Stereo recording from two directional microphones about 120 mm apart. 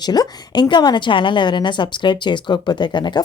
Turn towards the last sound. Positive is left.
turn(degrees=40)  # may be behind; listen again after turning